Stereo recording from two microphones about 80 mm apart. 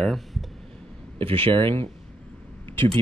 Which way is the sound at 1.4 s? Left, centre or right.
Right.